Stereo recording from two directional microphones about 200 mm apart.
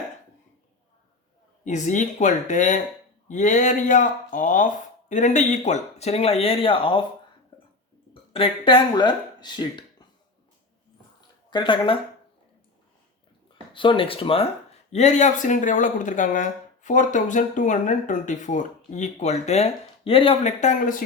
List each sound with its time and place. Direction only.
1.6 s speech: 40° left (ahead or behind)
7.5 s a sound: 25° left (ahead or behind)
8.3 s speech: 25° left (ahead or behind)
11.5 s speech: 25° left (ahead or behind)
13.5 s speech: 25° left (ahead or behind); by 21.0 s 40° left (ahead or behind)